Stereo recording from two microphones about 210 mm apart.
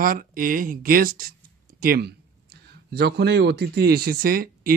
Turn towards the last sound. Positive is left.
turn(degrees=-45)  # may be behind; listen again after turning